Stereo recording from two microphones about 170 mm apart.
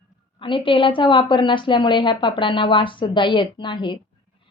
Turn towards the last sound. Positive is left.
turn(degrees=30)  # may be behind; listen again after turning